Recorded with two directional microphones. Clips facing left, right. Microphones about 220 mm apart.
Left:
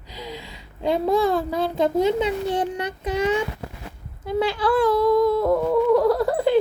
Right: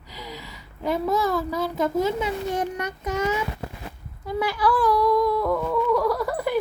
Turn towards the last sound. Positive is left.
turn(degrees=25)  # may be behind; listen again after turning